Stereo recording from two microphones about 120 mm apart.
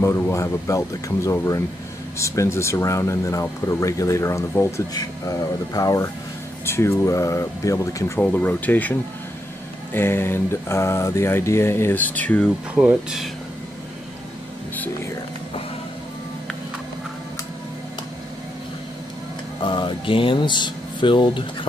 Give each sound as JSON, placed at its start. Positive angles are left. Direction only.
{"t": 0.0, "sound": "speech", "side_deg": 25}
{"t": 8.2, "sound": "speech", "side_deg": 10}
{"t": 9.9, "sound": "speech", "side_deg": 20}
{"t": 12.7, "sound": "speech", "side_deg": -5}
{"t": 19.6, "sound": "speech", "side_deg": 40}